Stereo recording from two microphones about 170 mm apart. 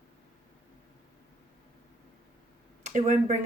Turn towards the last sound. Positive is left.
turn(degrees=-45)  # may be behind; listen again after turning